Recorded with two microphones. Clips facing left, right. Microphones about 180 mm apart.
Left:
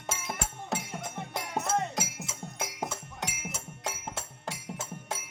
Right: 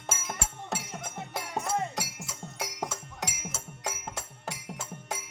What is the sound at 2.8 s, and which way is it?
Music, 15° left (ahead or behind).